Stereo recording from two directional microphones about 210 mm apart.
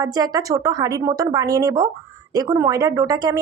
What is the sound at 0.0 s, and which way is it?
Speech, 20° right (ahead or behind).